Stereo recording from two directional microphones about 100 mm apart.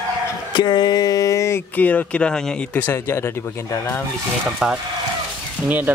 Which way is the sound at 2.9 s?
25° left (ahead or behind).